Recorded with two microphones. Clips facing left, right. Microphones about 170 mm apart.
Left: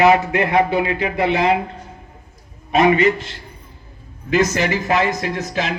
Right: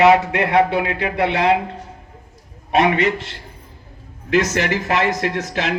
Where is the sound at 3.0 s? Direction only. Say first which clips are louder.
Left 3 dB; 75° right (ahead or behind).